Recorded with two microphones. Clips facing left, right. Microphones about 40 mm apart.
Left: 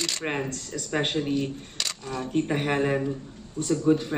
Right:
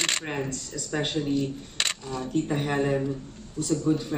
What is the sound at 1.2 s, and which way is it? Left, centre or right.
Speech, centre.